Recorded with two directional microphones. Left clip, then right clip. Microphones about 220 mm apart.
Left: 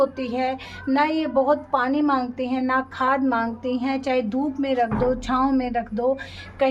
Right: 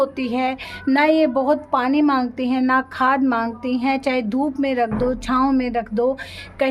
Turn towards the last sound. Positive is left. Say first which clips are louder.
# right 1 dB
turn(degrees=-55)  # may be behind; listen again after turning